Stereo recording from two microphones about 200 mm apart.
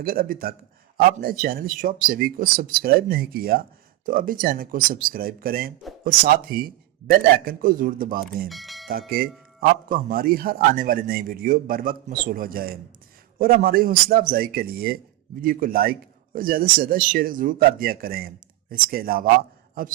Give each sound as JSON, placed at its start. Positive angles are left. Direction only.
{"t": 0.0, "sound": "a man's voice", "side_deg": -45}
{"t": 8.4, "sound": "speech", "side_deg": 0}
{"t": 8.9, "sound": "a man's voice", "side_deg": -50}